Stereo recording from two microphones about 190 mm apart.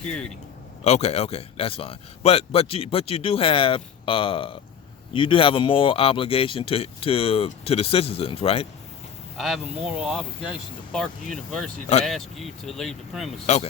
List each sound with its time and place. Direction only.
0.0 s speech: 5° left (ahead or behind)
0.9 s speech: 35° left (ahead or behind)
9.4 s speech: 5° right (ahead or behind)
13.5 s speech: 35° left (ahead or behind)